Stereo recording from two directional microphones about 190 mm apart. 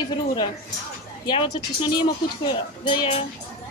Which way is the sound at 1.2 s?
25° left (ahead or behind).